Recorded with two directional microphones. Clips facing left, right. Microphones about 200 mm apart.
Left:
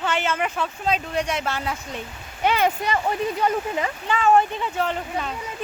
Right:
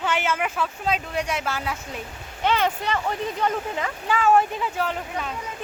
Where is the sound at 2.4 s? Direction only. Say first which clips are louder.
Left 2 dB; 10° left (ahead or behind).